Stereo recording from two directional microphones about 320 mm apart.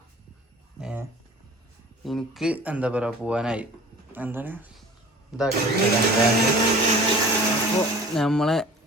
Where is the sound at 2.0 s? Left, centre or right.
Centre.